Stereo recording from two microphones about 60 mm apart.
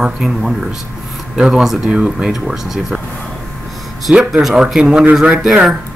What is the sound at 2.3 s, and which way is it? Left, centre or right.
Speech, centre.